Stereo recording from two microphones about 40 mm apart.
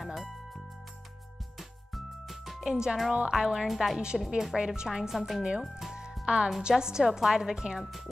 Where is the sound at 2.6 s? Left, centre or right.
Centre.